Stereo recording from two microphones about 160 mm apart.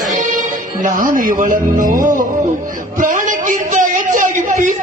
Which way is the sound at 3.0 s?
55° right (ahead or behind).